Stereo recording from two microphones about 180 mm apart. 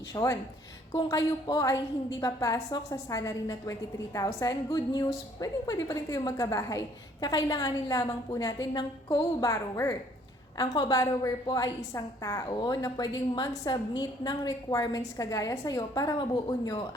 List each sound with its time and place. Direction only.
0.1 s a woman's voice: 20° left (ahead or behind)